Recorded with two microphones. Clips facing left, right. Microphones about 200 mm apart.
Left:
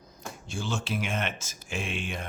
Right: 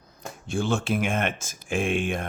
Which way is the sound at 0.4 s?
55° right (ahead or behind).